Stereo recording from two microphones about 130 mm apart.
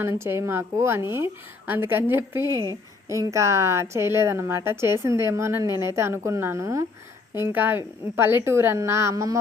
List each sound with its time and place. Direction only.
0.0 s a woman's voice: 20° right (ahead or behind)